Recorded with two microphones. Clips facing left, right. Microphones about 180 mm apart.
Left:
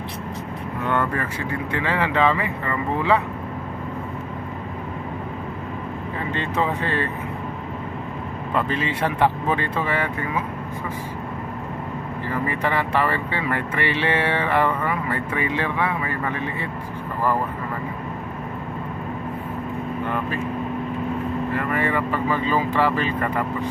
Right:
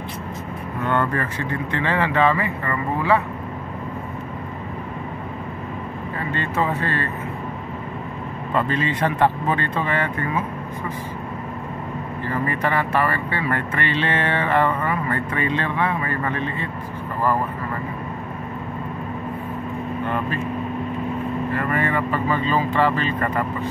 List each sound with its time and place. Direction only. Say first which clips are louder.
0.8 s speech: right 1 dB; 10° left (ahead or behind)
6.3 s speech: right 1 dB; 15° left (ahead or behind)
8.5 s speech: right 2 dB; 10° left (ahead or behind)
12.4 s speech: right 1 dB; 15° left (ahead or behind)
21.5 s speech: right 1 dB; 10° left (ahead or behind)